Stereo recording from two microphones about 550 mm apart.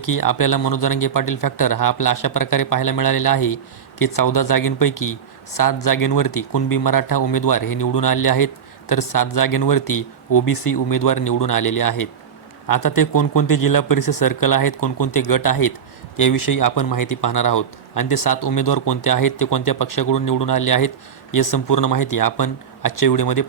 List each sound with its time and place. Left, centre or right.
0.0 s speech: left
10.4 s speech: left
10.7 s speech: left